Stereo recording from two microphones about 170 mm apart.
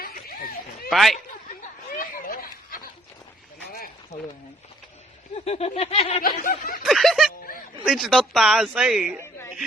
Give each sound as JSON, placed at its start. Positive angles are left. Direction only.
{"t": 0.0, "sound": "a sound", "side_deg": 60}
{"t": 0.9, "sound": "speech", "side_deg": 0}
{"t": 2.0, "sound": "a sound", "side_deg": 55}
{"t": 4.1, "sound": "snicker", "side_deg": 40}
{"t": 5.5, "sound": "snicker", "side_deg": 40}
{"t": 6.2, "sound": "speech", "side_deg": 55}
{"t": 6.8, "sound": "chuckle", "side_deg": 0}
{"t": 7.9, "sound": "speech", "side_deg": -5}